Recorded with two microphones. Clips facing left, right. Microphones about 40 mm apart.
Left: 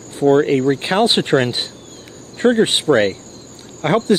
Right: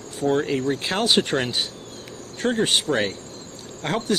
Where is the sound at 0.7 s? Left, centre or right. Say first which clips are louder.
Left 7 dB; left.